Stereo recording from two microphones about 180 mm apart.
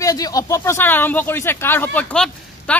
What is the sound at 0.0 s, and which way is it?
Speech, 20° left (ahead or behind).